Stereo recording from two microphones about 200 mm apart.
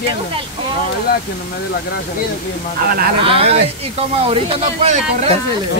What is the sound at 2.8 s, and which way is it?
Speech, 50° right (ahead or behind).